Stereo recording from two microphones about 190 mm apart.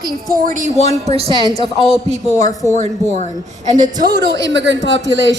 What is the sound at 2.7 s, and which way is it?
Child singing, 40° right (ahead or behind).